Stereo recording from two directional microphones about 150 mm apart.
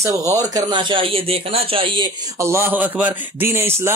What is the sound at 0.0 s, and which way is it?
Speech, 20° right (ahead or behind).